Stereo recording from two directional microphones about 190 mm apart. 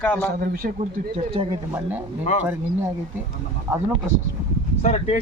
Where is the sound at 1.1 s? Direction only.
30° right (ahead or behind).